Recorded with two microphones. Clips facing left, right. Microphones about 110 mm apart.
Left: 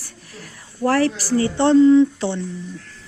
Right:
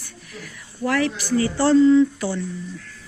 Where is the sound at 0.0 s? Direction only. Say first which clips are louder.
Right 1 dB; 35° left (ahead or behind).